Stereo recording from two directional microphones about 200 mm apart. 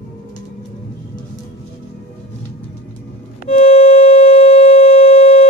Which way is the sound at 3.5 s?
30° left (ahead or behind).